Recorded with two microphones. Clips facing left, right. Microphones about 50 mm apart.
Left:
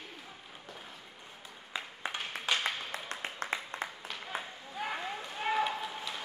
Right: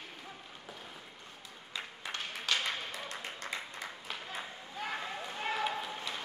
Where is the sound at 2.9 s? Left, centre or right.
Left.